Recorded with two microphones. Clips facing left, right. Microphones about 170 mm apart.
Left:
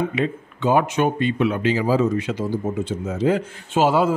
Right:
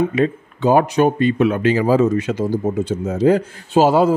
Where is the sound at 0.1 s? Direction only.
40° right (ahead or behind).